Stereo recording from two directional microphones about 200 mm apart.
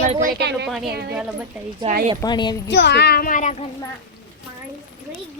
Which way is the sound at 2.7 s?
60° left (ahead or behind).